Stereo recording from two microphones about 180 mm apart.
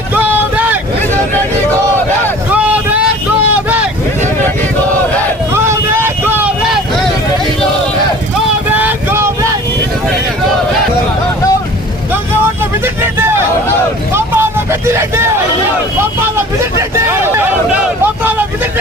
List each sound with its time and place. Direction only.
0.1 s a sound: 10° right (ahead or behind)
2.5 s vehicle: 10° right (ahead or behind)
5.5 s vehicle: 15° right (ahead or behind)
8.7 s vehicle: 10° right (ahead or behind)
12.8 s vehicle: 10° right (ahead or behind)
17.1 s a sound: 10° right (ahead or behind)
18.0 s vehicle: 10° right (ahead or behind)